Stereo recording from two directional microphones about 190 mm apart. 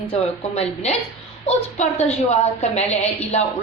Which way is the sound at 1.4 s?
35° left (ahead or behind).